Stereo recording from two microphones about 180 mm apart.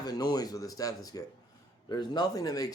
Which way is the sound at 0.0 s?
20° left (ahead or behind).